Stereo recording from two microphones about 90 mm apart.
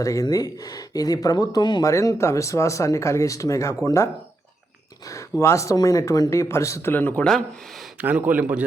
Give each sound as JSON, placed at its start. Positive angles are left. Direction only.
{"t": 0.0, "sound": "speech", "side_deg": 40}
{"t": 1.8, "sound": "speech", "side_deg": 35}
{"t": 5.4, "sound": "speech", "side_deg": 35}
{"t": 7.2, "sound": "speech", "side_deg": 15}
{"t": 8.0, "sound": "a man's voice", "side_deg": -20}